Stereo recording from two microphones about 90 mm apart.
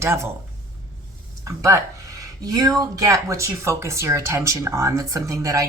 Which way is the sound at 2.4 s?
40° right (ahead or behind).